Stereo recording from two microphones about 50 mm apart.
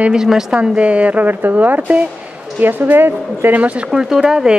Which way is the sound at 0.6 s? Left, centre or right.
Right.